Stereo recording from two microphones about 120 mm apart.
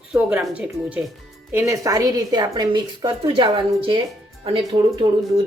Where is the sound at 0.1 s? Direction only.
10° right (ahead or behind).